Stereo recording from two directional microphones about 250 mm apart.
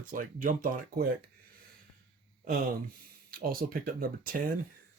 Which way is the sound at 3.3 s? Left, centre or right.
Right.